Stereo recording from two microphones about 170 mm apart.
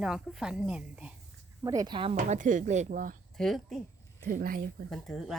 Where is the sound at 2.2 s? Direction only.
50° right (ahead or behind).